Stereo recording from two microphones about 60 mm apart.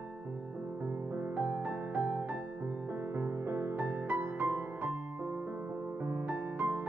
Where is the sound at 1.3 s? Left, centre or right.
Right.